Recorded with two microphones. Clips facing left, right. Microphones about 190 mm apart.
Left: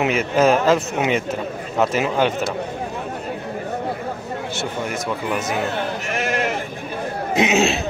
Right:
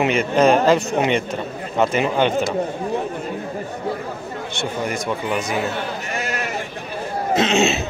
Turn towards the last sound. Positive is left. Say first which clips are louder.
# even
turn(degrees=0)  # may be behind; listen again after turning